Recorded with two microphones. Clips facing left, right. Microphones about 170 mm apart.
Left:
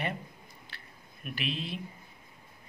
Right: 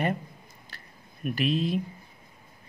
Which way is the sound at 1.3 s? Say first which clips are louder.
Right 10 dB; 40° right (ahead or behind).